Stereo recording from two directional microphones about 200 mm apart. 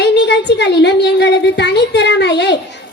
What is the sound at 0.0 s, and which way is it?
A woman's voice, 60° left (ahead or behind).